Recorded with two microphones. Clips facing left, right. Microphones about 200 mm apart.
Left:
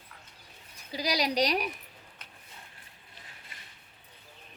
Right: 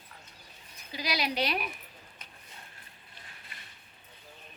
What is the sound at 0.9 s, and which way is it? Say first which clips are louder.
Speech: left 3 dB; 35° left (ahead or behind).